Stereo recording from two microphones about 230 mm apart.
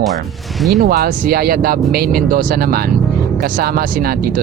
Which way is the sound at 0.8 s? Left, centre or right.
Right.